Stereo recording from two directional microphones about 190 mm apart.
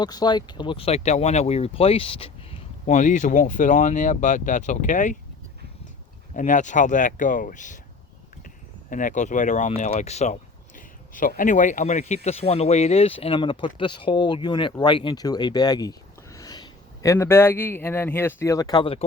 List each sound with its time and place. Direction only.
0.0 s speech: 20° left (ahead or behind); by 5.1 s 40° left (ahead or behind)
6.3 s speech: 40° left (ahead or behind)
8.9 s speech: 45° left (ahead or behind); by 19.0 s 25° left (ahead or behind)